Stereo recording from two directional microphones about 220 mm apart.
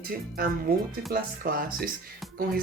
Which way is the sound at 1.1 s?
40° right (ahead or behind).